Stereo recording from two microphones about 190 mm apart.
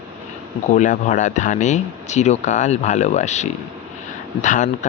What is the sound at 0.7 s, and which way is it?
Speech, 40° left (ahead or behind).